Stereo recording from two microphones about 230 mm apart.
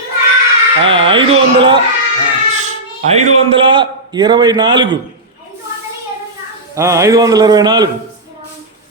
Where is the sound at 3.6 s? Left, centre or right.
Right.